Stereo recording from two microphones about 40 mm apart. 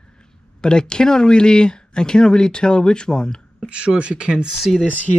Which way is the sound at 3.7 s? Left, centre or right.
Right.